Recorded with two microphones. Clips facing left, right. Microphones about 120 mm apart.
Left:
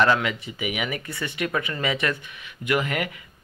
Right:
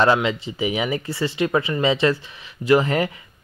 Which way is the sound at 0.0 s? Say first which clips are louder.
Right 3 dB; 25° right (ahead or behind).